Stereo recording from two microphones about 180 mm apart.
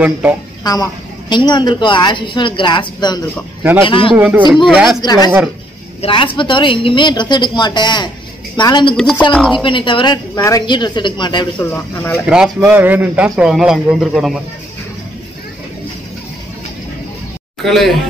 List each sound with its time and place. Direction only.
0.0 s speech: 10° right (ahead or behind)
1.3 s a woman's voice: 25° left (ahead or behind)
4.1 s a man's voice: 5° right (ahead or behind)
5.0 s a woman's voice: 20° left (ahead or behind)
8.9 s a man's voice: 5° left (ahead or behind)
9.5 s a woman's voice: 25° left (ahead or behind)
11.6 s speech: 15° left (ahead or behind)
12.3 s a man's voice: 5° right (ahead or behind)
17.6 s a man's voice: centre (ahead or behind)